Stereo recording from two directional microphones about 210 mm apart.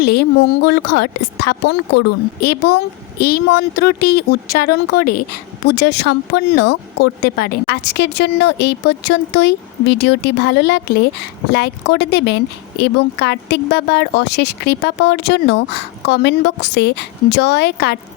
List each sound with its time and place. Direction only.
0.0 s a woman's voice: 50° left (ahead or behind)